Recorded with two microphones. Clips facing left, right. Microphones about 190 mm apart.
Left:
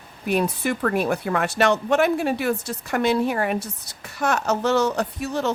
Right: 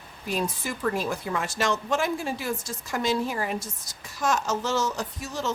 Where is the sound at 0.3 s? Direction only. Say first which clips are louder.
Left 7 dB; 65° left (ahead or behind).